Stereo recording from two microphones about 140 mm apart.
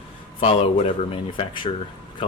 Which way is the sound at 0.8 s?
45° left (ahead or behind).